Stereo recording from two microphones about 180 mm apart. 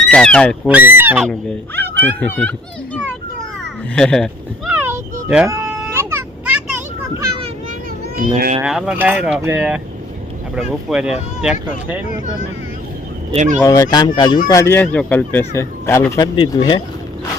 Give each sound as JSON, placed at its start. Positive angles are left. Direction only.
{"t": 0.1, "sound": "speech", "side_deg": 5}
{"t": 0.7, "sound": "speech", "side_deg": -10}
{"t": 2.0, "sound": "a child's voice", "side_deg": 10}
{"t": 4.7, "sound": "baby cry", "side_deg": -10}
{"t": 8.2, "sound": "speech", "side_deg": -50}
{"t": 8.6, "sound": "speech", "side_deg": -5}
{"t": 13.3, "sound": "fowl", "side_deg": -40}
{"t": 13.6, "sound": "fowl", "side_deg": 20}
{"t": 14.4, "sound": "speech", "side_deg": 15}